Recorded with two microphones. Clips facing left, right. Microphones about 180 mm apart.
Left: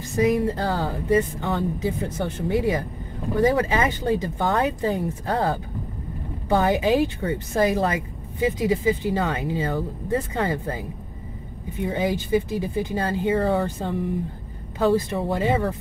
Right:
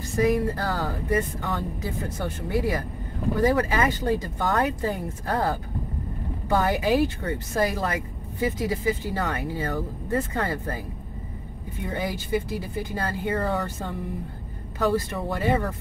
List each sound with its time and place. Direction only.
0.1 s speech: 20° left (ahead or behind)
11.8 s speech: 20° left (ahead or behind)
15.0 s speech: 20° left (ahead or behind)